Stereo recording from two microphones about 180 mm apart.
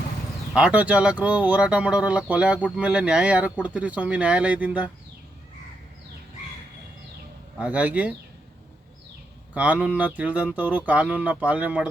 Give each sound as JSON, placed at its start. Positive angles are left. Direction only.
{"t": 0.5, "sound": "speech", "side_deg": -5}
{"t": 7.6, "sound": "speech", "side_deg": -10}
{"t": 9.6, "sound": "speech", "side_deg": -5}